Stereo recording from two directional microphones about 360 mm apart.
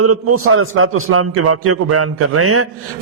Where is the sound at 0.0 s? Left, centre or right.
Right.